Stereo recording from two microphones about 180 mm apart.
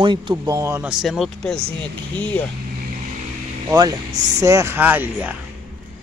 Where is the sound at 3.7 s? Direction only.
20° right (ahead or behind).